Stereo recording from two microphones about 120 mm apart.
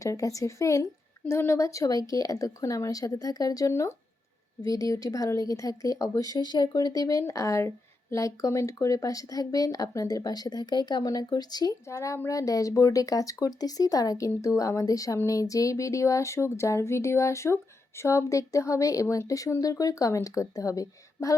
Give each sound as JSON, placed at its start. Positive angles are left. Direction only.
{"t": 0.0, "sound": "speech", "side_deg": 25}